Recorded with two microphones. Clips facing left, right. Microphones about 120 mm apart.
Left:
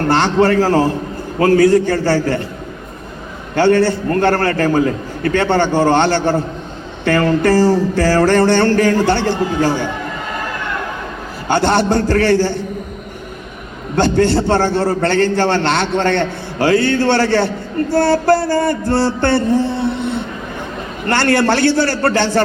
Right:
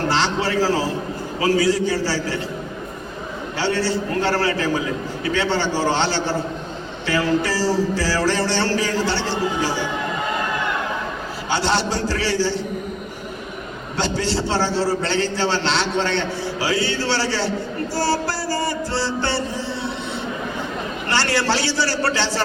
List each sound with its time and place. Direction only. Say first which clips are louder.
0.1 s a man's voice: left 8 dB; 55° left (ahead or behind)
3.5 s a man's voice: left 10 dB; 55° left (ahead or behind)
11.4 s a man's voice: left 7 dB; 55° left (ahead or behind)
13.9 s a man's voice: left 9 dB; 55° left (ahead or behind)